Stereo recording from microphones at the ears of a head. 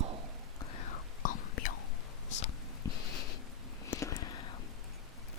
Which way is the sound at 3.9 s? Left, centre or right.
Left.